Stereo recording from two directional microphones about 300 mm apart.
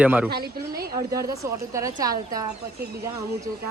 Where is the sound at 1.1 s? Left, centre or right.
Centre.